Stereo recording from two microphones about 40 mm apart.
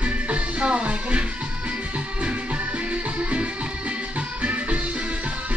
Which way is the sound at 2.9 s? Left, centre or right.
Right.